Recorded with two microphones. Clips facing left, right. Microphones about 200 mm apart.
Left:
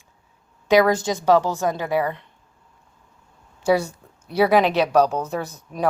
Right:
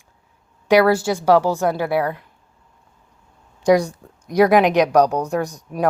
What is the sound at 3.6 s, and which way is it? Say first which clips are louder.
A woman's voice: right 4 dB; 15° right (ahead or behind).